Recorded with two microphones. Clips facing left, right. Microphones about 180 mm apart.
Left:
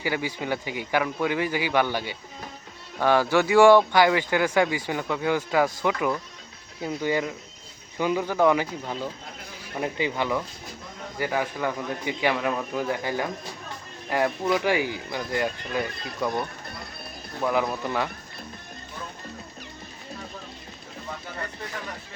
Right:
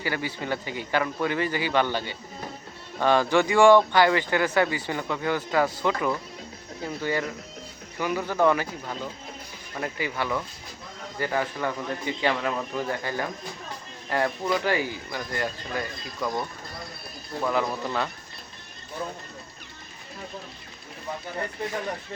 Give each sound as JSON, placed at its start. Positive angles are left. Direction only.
{"t": 0.0, "sound": "speech", "side_deg": 15}
{"t": 17.4, "sound": "speech", "side_deg": 15}